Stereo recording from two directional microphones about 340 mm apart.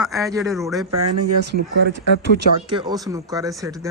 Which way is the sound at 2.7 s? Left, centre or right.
Centre.